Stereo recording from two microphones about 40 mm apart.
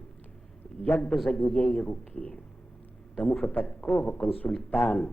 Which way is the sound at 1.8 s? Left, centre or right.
Left.